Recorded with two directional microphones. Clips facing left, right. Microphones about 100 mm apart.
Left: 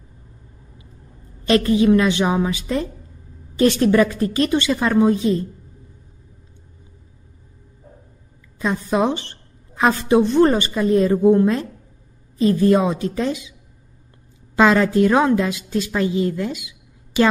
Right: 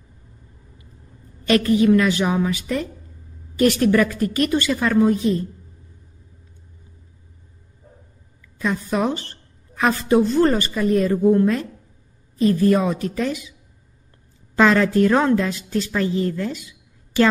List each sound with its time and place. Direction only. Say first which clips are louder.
1.4 s a woman's voice: left 1 dB; 25° left (ahead or behind)
8.5 s a woman's voice: left 2 dB; 25° left (ahead or behind)